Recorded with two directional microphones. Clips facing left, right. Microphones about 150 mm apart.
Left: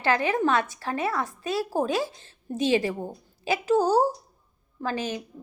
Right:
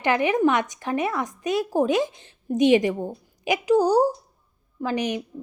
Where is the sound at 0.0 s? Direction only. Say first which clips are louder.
Right 3 dB; 20° right (ahead or behind).